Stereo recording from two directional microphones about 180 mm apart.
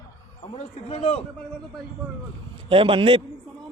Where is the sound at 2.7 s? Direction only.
30° right (ahead or behind).